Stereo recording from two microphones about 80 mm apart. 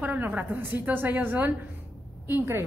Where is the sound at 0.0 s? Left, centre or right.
Right.